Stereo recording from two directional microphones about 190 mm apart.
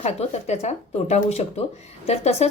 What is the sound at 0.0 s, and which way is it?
A woman's voice, 35° left (ahead or behind).